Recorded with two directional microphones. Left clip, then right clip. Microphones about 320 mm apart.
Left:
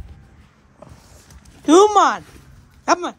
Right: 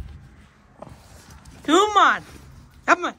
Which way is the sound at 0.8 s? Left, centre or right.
Centre.